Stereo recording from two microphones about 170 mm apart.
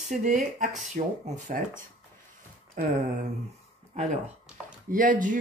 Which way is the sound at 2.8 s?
50° right (ahead or behind).